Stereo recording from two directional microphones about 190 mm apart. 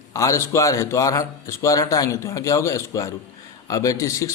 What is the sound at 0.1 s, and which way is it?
A man's voice, 15° left (ahead or behind).